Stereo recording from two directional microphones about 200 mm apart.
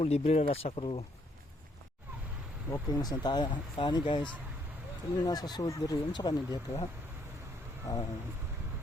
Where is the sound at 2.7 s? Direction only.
20° left (ahead or behind).